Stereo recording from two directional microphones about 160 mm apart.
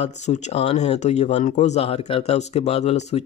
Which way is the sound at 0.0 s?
45° left (ahead or behind).